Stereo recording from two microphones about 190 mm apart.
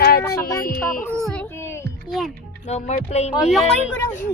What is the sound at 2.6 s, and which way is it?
Speech, 35° left (ahead or behind).